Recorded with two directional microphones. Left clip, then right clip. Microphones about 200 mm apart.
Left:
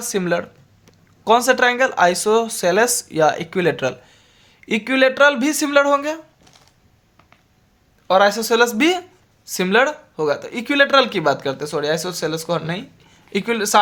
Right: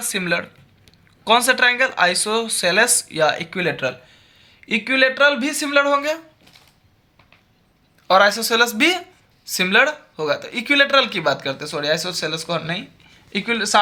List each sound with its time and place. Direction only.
0.0 s speech: 40° left (ahead or behind)
8.0 s speech: 25° left (ahead or behind)